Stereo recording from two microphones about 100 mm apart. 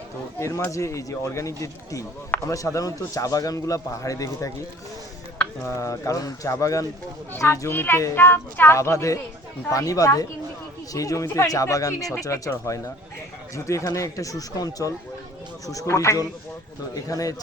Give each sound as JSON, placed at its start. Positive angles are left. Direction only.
{"t": 0.3, "sound": "a man's voice", "side_deg": 30}
{"t": 5.6, "sound": "a man's voice", "side_deg": 30}